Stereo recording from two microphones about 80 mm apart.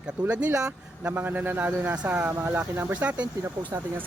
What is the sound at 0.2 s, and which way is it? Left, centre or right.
Speech, centre.